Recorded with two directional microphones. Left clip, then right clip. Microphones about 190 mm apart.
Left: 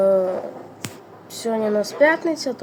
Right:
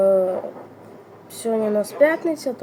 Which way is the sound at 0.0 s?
Centre (ahead or behind).